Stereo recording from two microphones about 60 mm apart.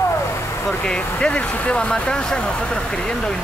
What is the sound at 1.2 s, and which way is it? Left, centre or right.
Speech, centre.